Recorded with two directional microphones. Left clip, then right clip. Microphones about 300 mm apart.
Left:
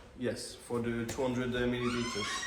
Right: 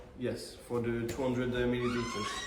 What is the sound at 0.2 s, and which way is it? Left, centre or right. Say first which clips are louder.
Speech: left 1 dB; centre.